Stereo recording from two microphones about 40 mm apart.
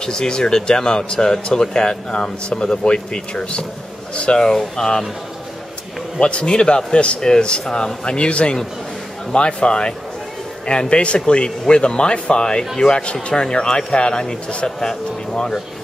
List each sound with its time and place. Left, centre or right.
0.0 s speech: centre
4.7 s speech: centre
6.1 s speech: left
7.2 s speech: centre